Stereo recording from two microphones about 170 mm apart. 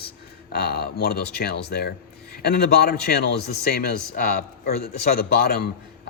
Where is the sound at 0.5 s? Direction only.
65° left (ahead or behind).